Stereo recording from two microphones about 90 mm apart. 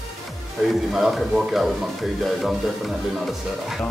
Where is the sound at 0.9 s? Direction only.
5° right (ahead or behind).